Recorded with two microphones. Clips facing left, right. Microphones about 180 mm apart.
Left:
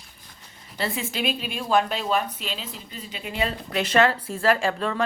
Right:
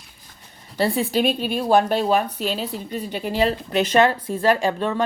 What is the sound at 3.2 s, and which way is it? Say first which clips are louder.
Speech: right 6 dB; 35° right (ahead or behind).